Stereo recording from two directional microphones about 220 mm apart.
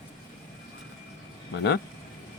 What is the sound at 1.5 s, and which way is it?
Speech, 50° left (ahead or behind).